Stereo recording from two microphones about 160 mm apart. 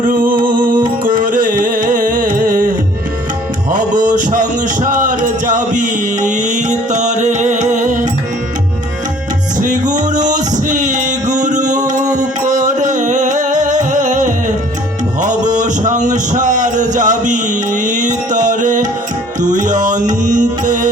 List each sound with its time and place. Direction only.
0.0 s music: 60° right (ahead or behind)
3.8 s music: 55° right (ahead or behind)
9.6 s music: 50° right (ahead or behind)
10.0 s male singing: 50° right (ahead or behind)
12.0 s music: 25° right (ahead or behind)
12.5 s music: 50° right (ahead or behind)
15.2 s a sound: 50° right (ahead or behind)
19.4 s music: 50° right (ahead or behind)